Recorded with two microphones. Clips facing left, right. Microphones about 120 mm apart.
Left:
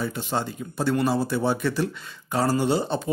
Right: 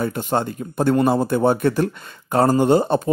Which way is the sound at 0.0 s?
50° right (ahead or behind).